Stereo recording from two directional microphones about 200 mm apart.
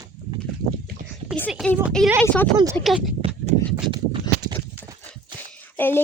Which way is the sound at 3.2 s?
25° right (ahead or behind).